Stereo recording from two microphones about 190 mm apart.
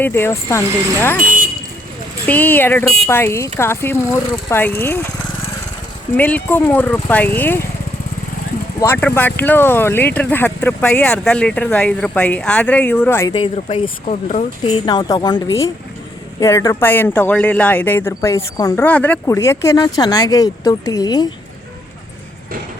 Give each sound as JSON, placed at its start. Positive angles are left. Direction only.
{"t": 0.0, "sound": "speech", "side_deg": 10}
{"t": 2.2, "sound": "speech", "side_deg": 10}
{"t": 6.1, "sound": "speech", "side_deg": 10}
{"t": 8.8, "sound": "speech", "side_deg": 10}
{"t": 13.3, "sound": "speech", "side_deg": 30}
{"t": 14.1, "sound": "speech", "side_deg": 40}
{"t": 14.6, "sound": "speech", "side_deg": 25}